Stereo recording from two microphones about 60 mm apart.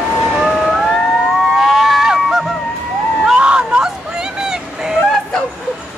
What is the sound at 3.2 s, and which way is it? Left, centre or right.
Vehicle, centre.